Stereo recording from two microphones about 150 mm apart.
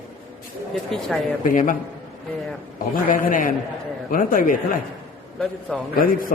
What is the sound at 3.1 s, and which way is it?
A man's voice, 65° left (ahead or behind).